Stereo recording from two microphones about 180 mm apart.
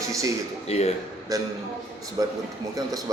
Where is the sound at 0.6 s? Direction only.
35° left (ahead or behind).